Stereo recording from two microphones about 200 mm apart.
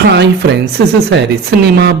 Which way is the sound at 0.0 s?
55° right (ahead or behind).